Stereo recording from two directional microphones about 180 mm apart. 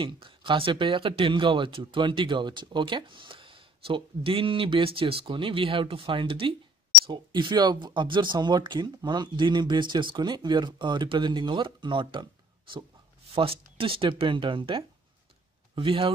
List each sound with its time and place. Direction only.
0.0 s speech: 30° right (ahead or behind)
13.3 s speech: 30° right (ahead or behind)